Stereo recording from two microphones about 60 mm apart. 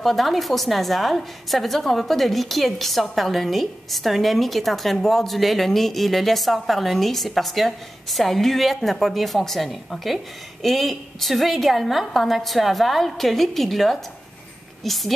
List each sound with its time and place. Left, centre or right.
0.0 s a woman's voice: centre